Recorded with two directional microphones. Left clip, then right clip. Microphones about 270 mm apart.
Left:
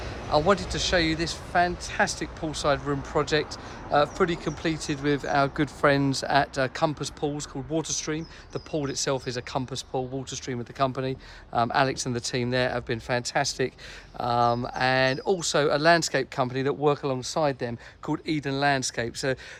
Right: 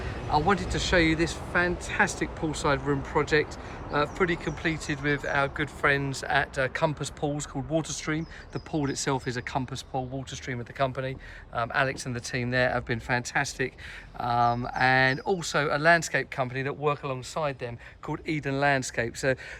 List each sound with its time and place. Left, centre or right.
0.3 s speech: centre